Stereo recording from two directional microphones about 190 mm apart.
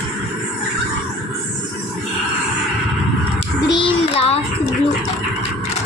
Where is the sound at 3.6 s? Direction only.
30° left (ahead or behind).